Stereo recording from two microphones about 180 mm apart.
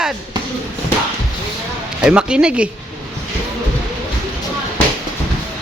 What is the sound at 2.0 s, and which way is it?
Speech, 5° right (ahead or behind).